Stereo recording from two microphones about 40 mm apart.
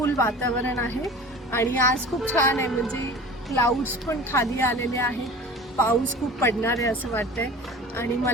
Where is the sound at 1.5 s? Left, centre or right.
Left.